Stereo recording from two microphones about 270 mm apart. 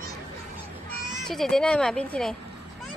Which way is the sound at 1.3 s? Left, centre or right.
Centre.